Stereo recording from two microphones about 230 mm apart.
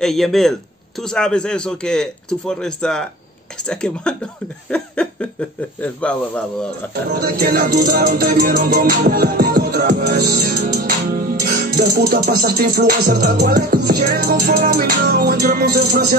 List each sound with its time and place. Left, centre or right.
0.0 s speech: centre
7.1 s music: right